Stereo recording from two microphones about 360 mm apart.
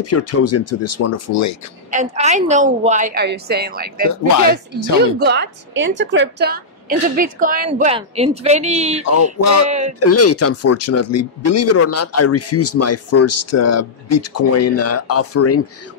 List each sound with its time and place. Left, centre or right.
0.0 s speech: left
1.9 s a woman's voice: centre
5.2 s a woman's voice: right
9.0 s speech: left
9.7 s a woman's voice: centre
9.9 s speech: left